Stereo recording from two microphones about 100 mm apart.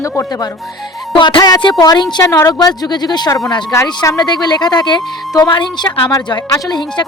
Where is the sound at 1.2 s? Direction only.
50° left (ahead or behind).